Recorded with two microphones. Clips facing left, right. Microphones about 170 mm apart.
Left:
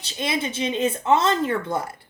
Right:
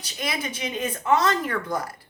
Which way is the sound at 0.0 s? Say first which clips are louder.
Left 4 dB; 25° left (ahead or behind).